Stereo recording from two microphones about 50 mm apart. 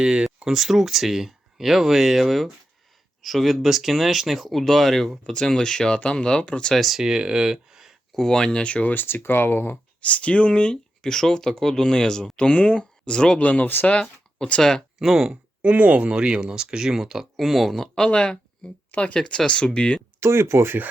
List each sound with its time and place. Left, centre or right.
0.0 s speech: centre
0.4 s speech: centre
5.3 s speech: centre
6.7 s speech: centre
7.0 s speech: centre
8.1 s speech: centre
8.9 s speech: left
10.0 s speech: left
13.4 s speech: left
14.0 s speech: centre
14.9 s speech: centre
15.6 s speech: right; by 17.8 s centre
18.1 s speech: centre
20.1 s speech: right